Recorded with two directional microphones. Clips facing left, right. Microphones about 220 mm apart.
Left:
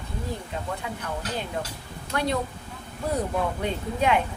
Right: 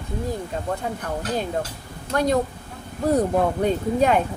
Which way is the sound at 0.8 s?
40° right (ahead or behind).